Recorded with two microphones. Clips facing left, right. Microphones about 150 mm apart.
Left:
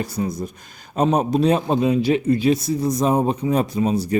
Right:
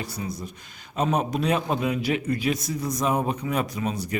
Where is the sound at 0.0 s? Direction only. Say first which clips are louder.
Left 8 dB; 45° left (ahead or behind).